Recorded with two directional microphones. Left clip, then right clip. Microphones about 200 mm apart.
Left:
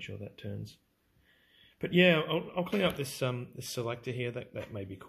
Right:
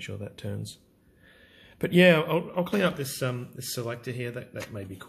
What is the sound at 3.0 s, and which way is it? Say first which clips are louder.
Speech: right 3 dB; 20° left (ahead or behind).